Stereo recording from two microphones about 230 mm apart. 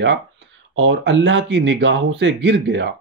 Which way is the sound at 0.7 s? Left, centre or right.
Right.